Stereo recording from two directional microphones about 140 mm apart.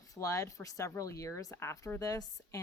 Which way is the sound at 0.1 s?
20° left (ahead or behind).